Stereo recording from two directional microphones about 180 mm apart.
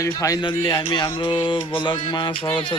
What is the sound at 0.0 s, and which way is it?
Speech, 15° left (ahead or behind).